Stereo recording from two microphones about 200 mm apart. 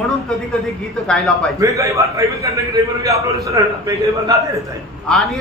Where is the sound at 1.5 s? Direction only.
15° right (ahead or behind).